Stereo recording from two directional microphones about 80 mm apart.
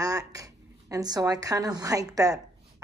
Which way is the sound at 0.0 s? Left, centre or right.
Right.